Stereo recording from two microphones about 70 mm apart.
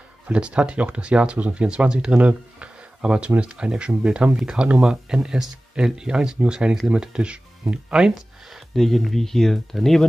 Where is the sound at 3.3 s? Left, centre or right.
Centre.